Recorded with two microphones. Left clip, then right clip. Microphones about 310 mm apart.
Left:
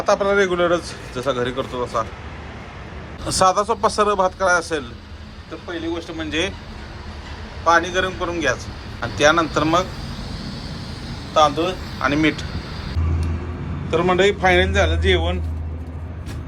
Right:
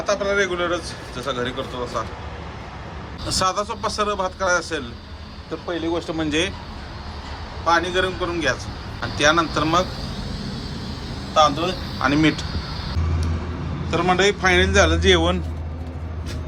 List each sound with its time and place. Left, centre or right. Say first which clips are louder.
0.0 s a man's voice: left 4 dB; centre
3.2 s a man's voice: left 5 dB; centre
5.8 s speech: right 3 dB; centre
7.6 s a man's voice: left 2 dB; centre
10.2 s vehicle: right 1 dB; right
11.3 s speech: left 1 dB; centre
13.9 s a man's voice: left 2 dB; centre